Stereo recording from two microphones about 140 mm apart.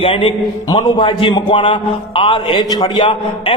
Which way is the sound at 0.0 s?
40° left (ahead or behind).